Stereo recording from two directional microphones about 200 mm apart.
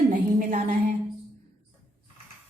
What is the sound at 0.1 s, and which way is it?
Music, 40° right (ahead or behind).